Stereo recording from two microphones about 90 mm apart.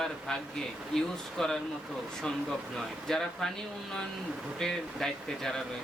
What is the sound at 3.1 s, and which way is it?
Speech, 5° left (ahead or behind).